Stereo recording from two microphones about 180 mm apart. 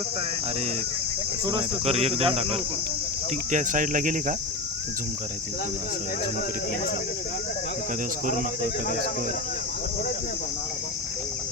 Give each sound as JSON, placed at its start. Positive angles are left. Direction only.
{"t": 1.5, "sound": "speech", "side_deg": -30}
{"t": 3.5, "sound": "speech", "side_deg": -45}